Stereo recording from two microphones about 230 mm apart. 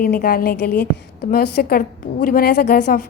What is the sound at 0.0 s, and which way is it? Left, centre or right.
A woman's voice, left.